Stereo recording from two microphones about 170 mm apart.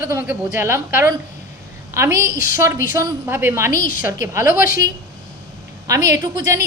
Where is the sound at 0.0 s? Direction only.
15° right (ahead or behind).